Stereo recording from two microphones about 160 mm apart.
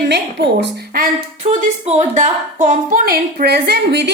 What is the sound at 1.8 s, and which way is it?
A woman's voice, 45° right (ahead or behind).